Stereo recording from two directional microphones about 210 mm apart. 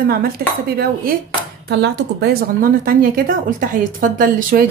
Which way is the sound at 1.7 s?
55° right (ahead or behind).